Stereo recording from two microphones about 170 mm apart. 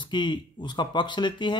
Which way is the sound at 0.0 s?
25° left (ahead or behind).